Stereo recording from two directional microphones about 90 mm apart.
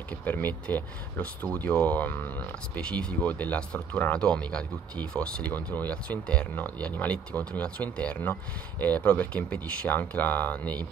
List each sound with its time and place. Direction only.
0.2 s speech: 20° left (ahead or behind)